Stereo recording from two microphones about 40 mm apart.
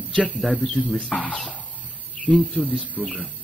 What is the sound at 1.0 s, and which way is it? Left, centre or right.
Speech, left.